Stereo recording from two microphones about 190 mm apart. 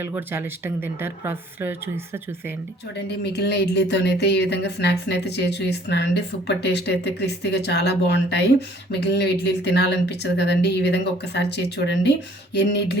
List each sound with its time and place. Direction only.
0.0 s speech: 10° right (ahead or behind)
3.3 s speech: 60° left (ahead or behind)